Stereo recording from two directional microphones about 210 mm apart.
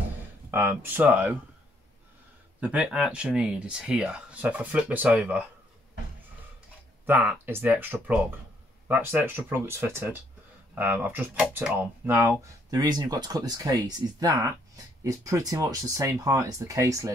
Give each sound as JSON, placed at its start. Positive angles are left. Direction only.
{"t": 0.5, "sound": "speech", "side_deg": -10}
{"t": 2.6, "sound": "speech", "side_deg": -5}
{"t": 7.1, "sound": "speech", "side_deg": -10}